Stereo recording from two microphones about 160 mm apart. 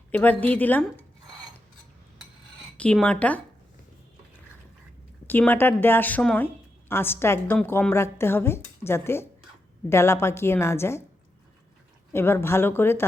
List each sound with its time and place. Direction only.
0.1 s a woman's voice: 10° left (ahead or behind)
2.7 s a woman's voice: 5° left (ahead or behind)
5.3 s a woman's voice: 10° left (ahead or behind)
12.1 s a woman's voice: 15° left (ahead or behind)